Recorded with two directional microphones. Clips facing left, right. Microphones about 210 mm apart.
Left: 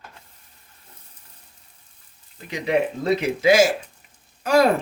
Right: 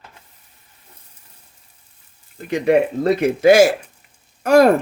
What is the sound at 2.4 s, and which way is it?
Speech, 55° right (ahead or behind).